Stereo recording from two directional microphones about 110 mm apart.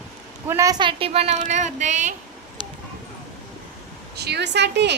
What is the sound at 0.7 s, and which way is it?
A woman's voice, 50° right (ahead or behind).